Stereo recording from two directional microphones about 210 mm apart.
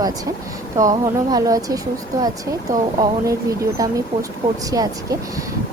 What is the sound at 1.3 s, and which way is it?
A woman's voice, 15° right (ahead or behind).